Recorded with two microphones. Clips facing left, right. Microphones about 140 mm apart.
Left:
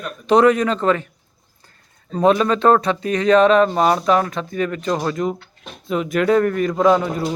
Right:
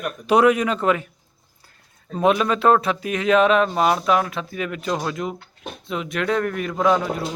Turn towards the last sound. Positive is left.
turn(degrees=5)  # may be behind; listen again after turning